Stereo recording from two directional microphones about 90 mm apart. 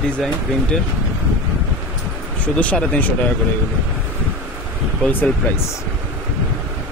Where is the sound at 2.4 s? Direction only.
15° left (ahead or behind).